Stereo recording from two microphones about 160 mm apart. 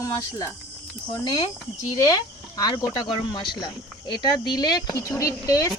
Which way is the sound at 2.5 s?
25° left (ahead or behind).